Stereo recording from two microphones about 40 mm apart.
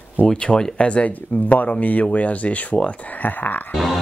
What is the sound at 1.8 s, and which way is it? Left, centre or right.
Speech, left.